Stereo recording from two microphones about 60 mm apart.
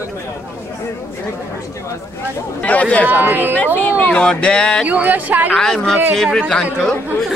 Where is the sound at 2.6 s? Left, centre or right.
Left.